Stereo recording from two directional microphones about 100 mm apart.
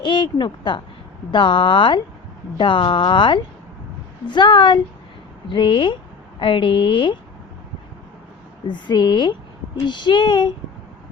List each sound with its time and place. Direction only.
0.0 s a woman's voice: 50° left (ahead or behind)
8.6 s a woman's voice: 50° left (ahead or behind)